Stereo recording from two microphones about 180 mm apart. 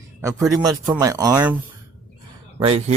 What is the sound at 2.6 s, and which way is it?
Speech, 30° right (ahead or behind).